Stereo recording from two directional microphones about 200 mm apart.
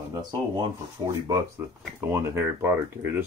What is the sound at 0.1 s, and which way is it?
Speech, 20° right (ahead or behind).